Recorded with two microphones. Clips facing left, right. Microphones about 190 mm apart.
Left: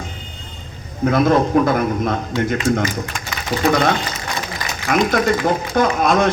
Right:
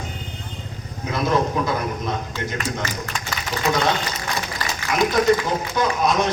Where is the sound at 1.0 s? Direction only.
55° left (ahead or behind).